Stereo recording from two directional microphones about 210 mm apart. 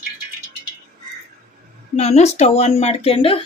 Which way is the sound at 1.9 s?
30° left (ahead or behind).